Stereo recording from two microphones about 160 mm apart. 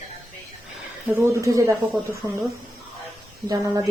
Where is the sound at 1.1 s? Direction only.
20° right (ahead or behind).